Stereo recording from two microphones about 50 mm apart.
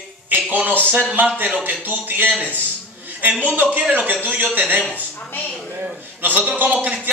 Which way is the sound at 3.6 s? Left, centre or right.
Right.